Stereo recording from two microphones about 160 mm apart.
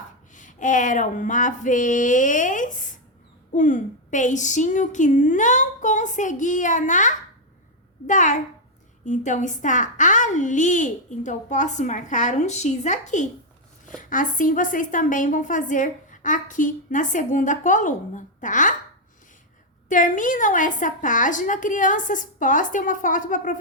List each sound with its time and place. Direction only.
0.3 s a woman's voice: 50° left (ahead or behind)
19.9 s a woman's voice: 55° left (ahead or behind)